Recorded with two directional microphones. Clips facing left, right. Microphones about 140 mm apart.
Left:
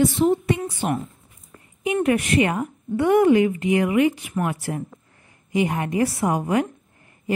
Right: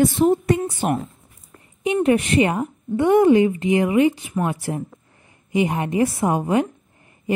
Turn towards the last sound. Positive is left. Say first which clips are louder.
# right 2 dB
turn(degrees=-25)  # may be behind; listen again after turning